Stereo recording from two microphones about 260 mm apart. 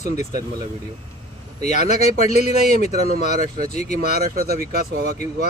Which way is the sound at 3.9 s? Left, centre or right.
Right.